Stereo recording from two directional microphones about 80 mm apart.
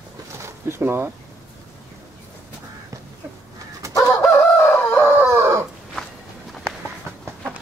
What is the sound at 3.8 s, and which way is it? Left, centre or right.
Chicken, right.